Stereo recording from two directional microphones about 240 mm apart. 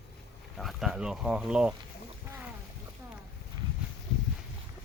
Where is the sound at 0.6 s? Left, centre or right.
Centre.